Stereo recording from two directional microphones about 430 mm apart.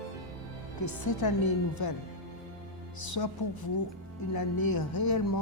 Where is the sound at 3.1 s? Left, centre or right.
Left.